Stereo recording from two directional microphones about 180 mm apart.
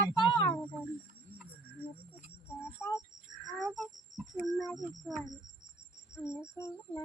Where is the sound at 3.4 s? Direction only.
Centre (ahead or behind).